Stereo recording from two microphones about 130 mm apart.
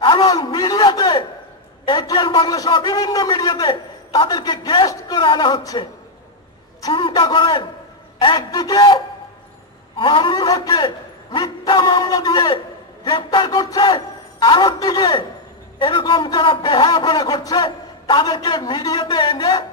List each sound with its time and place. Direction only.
0.0 s a sound: 35° left (ahead or behind)
1.9 s a man's voice: 35° left (ahead or behind)
6.9 s a man's voice: 40° left (ahead or behind)